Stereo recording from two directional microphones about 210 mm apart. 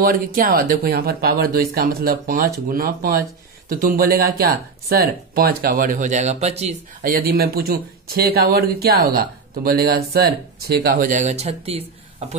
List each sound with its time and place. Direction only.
0.0 s speech: 45° right (ahead or behind)